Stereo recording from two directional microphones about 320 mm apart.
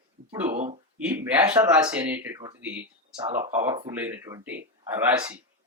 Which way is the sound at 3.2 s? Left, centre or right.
Right.